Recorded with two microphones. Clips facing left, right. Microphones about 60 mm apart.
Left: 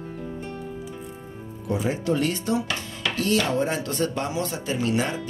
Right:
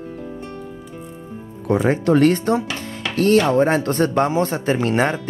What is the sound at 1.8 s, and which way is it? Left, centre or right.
Speech, right.